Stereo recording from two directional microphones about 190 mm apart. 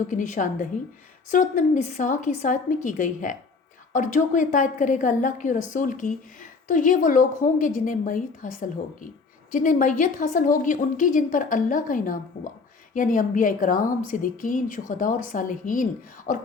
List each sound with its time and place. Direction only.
0.1 s a woman's voice: 40° left (ahead or behind)